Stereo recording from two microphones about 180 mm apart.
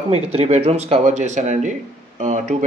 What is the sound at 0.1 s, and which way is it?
Speech, 35° right (ahead or behind).